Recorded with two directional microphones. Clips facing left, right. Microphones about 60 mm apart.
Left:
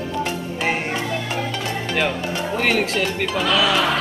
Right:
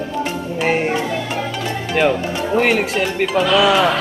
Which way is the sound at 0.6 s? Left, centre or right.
Centre.